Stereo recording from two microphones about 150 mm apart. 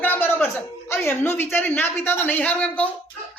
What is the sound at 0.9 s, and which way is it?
A man's voice, 15° left (ahead or behind).